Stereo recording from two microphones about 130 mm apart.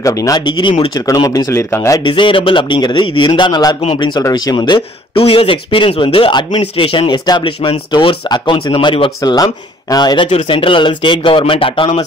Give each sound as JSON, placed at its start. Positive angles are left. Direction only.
{"t": 0.0, "sound": "speech", "side_deg": 25}
{"t": 2.0, "sound": "speech", "side_deg": 40}
{"t": 3.8, "sound": "speech", "side_deg": 45}
{"t": 4.1, "sound": "speech", "side_deg": 30}
{"t": 9.3, "sound": "speech", "side_deg": 30}